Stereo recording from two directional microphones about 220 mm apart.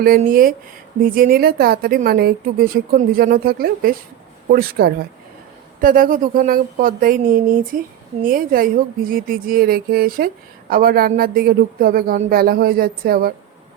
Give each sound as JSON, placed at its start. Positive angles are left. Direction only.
{"t": 0.0, "sound": "a woman's voice", "side_deg": -40}